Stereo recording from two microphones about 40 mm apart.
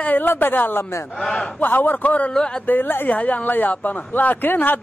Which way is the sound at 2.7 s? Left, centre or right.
Left.